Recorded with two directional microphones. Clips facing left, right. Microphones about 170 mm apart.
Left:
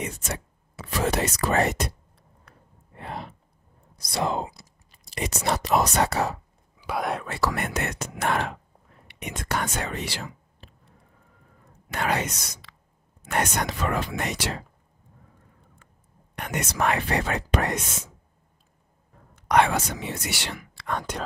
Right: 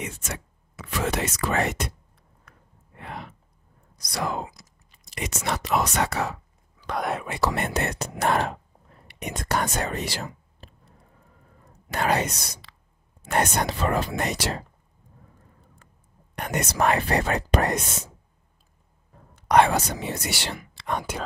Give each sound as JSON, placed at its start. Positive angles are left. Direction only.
{"t": 0.0, "sound": "speech", "side_deg": 35}
{"t": 2.5, "sound": "gasp", "side_deg": 35}
{"t": 3.0, "sound": "a sound", "side_deg": 35}
{"t": 3.9, "sound": "speech", "side_deg": 25}
{"t": 6.8, "sound": "speech", "side_deg": 5}
{"t": 7.2, "sound": "speech", "side_deg": -20}
{"t": 9.0, "sound": "whispering", "side_deg": -40}
{"t": 11.9, "sound": "speech", "side_deg": -35}
{"t": 16.3, "sound": "speech", "side_deg": -35}
{"t": 19.3, "sound": "speech", "side_deg": -35}